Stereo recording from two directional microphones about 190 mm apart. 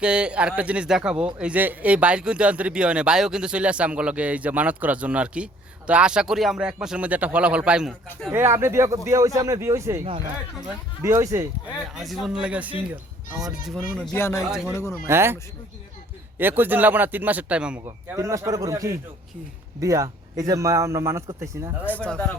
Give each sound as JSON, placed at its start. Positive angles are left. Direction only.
{"t": 0.0, "sound": "speech", "side_deg": -5}
{"t": 8.3, "sound": "speech", "side_deg": -15}
{"t": 11.0, "sound": "speech", "side_deg": -15}
{"t": 11.9, "sound": "speech", "side_deg": 0}
{"t": 14.1, "sound": "speech", "side_deg": 15}
{"t": 14.4, "sound": "speech", "side_deg": 0}
{"t": 14.7, "sound": "speech", "side_deg": 15}
{"t": 15.0, "sound": "speech", "side_deg": -15}
{"t": 16.4, "sound": "speech", "side_deg": -10}
{"t": 21.8, "sound": "speech", "side_deg": 5}